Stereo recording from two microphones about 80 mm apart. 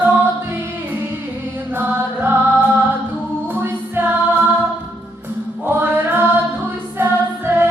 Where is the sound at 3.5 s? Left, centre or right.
Right.